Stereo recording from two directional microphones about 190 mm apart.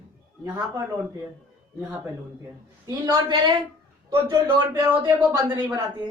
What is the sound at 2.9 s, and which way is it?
Speech, 25° right (ahead or behind).